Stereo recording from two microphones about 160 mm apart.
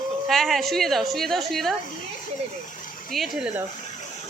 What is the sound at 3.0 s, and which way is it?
Speech, centre (ahead or behind).